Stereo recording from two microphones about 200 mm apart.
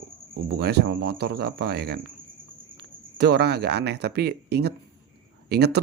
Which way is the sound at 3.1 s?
55° right (ahead or behind).